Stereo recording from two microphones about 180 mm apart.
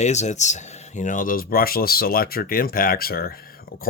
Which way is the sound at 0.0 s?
40° left (ahead or behind).